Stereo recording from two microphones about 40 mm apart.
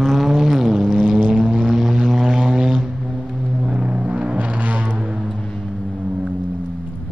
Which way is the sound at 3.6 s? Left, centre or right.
Right.